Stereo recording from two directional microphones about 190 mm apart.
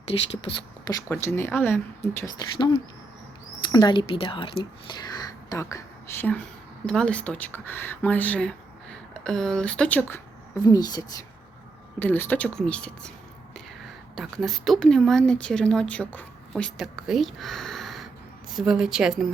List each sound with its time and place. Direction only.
0.1 s speech: 30° left (ahead or behind)
1.1 s speech: 15° left (ahead or behind)
10.6 s a woman's voice: 20° left (ahead or behind); by 13.1 s 5° left (ahead or behind)
14.2 s speech: centre (ahead or behind)